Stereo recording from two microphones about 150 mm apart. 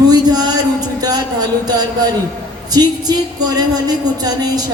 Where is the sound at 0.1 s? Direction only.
25° right (ahead or behind).